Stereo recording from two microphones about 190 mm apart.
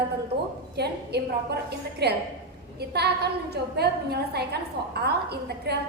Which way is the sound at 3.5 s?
60° right (ahead or behind).